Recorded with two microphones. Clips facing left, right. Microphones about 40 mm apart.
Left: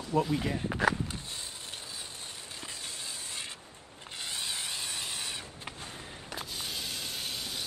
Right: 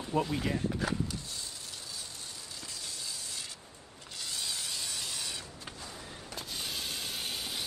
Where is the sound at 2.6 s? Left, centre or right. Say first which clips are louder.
Left 1 dB; left.